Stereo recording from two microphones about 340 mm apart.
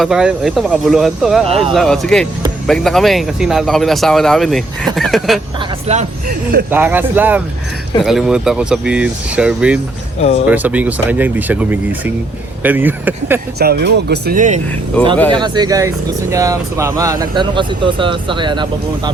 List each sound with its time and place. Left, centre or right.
0.0 s speech: centre
1.5 s speech: centre
1.7 s speech: centre
5.5 s speech: centre
6.7 s speech: centre
10.2 s speech: centre
10.4 s speech: centre
13.6 s speech: right